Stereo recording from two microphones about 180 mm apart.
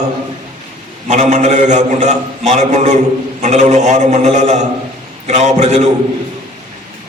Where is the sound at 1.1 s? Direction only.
40° right (ahead or behind).